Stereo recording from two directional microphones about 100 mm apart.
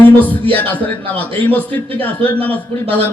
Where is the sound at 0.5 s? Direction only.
15° left (ahead or behind).